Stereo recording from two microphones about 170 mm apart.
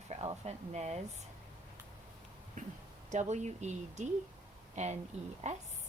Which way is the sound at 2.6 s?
50° right (ahead or behind).